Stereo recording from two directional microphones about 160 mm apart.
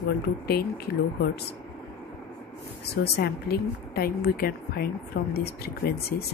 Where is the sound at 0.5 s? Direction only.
80° left.